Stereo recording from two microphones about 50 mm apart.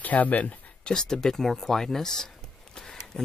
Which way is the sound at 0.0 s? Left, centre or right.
Left.